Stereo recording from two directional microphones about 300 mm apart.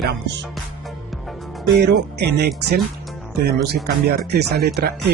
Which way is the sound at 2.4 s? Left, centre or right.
Right.